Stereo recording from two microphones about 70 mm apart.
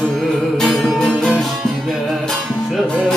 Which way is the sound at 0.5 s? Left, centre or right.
Centre.